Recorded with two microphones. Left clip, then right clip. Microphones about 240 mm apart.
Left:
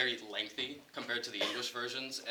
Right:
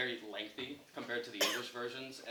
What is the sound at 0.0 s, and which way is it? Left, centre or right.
A man's voice, left.